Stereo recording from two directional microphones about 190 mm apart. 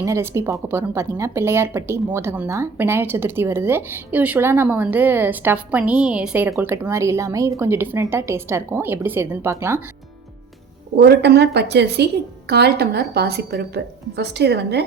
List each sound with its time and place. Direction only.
0.0 s speech: 15° right (ahead or behind)
10.9 s a woman's voice: 65° right (ahead or behind)